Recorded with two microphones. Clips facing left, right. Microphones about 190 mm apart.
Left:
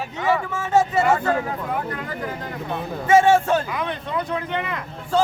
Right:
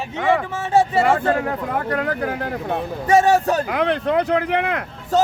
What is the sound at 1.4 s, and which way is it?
Speech, 70° right (ahead or behind).